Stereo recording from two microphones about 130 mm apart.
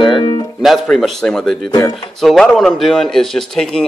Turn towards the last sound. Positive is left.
turn(degrees=5)  # may be behind; listen again after turning